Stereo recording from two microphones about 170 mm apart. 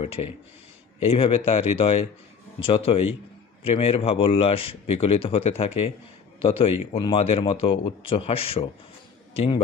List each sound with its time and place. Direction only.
0.0 s a man's voice: 35° left (ahead or behind)